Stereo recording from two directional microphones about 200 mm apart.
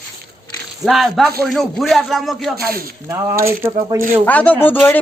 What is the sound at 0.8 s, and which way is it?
A man's voice, centre (ahead or behind).